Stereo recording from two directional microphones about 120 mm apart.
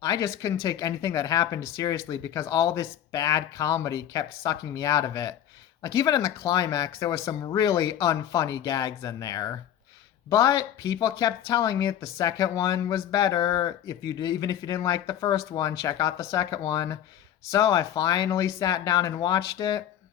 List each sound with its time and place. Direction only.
0.0 s speech: 30° left (ahead or behind)